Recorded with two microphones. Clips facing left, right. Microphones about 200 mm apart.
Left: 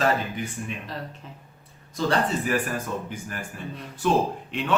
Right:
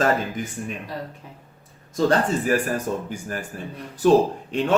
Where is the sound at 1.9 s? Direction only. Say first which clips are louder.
Right 4 dB; 40° right (ahead or behind).